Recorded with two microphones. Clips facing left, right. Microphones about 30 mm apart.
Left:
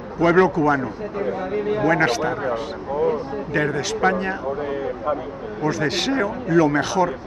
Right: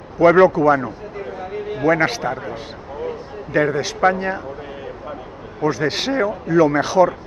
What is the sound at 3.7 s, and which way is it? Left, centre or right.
Speech, centre.